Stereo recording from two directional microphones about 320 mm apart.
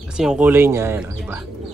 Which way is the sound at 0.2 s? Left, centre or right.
Centre.